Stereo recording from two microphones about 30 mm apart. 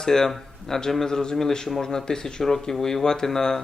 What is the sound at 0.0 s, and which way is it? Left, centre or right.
Speech, centre.